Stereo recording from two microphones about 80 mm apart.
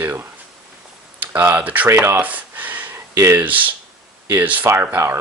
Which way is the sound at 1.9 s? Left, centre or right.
Right.